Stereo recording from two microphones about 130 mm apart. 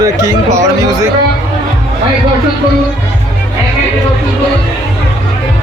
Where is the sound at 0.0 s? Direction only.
25° right (ahead or behind).